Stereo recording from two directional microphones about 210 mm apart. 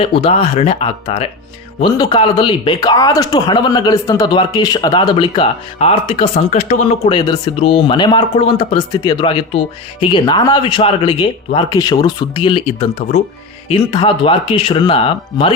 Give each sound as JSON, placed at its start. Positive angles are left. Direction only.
{"t": 0.0, "sound": "a man's voice", "side_deg": 25}